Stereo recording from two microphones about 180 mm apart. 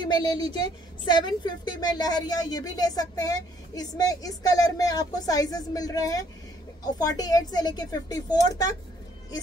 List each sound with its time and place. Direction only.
0.1 s a woman's voice: 25° left (ahead or behind)